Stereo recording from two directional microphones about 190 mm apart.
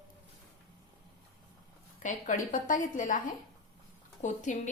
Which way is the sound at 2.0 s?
45° left (ahead or behind).